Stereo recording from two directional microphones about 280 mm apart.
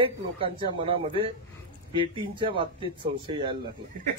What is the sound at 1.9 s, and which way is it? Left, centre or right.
Speech, centre.